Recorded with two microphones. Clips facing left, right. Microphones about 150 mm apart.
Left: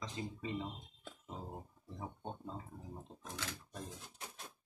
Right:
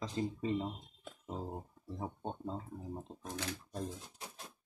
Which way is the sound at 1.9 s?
30° right (ahead or behind).